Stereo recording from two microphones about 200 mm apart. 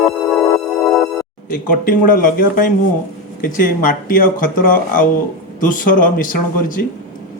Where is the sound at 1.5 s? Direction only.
45° left (ahead or behind).